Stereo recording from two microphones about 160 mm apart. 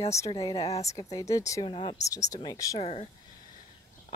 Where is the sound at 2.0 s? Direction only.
20° left (ahead or behind).